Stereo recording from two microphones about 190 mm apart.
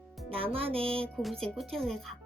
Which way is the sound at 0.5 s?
30° right (ahead or behind).